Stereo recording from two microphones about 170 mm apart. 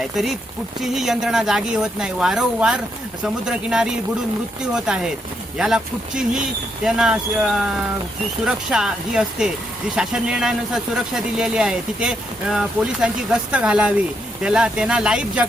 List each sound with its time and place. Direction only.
0.8 s speech: centre (ahead or behind)